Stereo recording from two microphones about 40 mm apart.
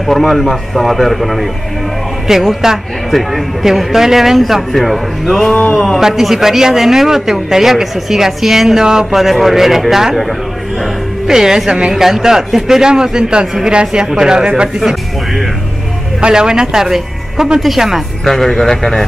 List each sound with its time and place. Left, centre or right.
0.2 s a man's voice: centre
3.6 s a man's voice: centre
5.5 s a sound: left
5.9 s a man's voice: centre
11.2 s a man's voice: centre
16.2 s a man's voice: right
18.2 s speech: centre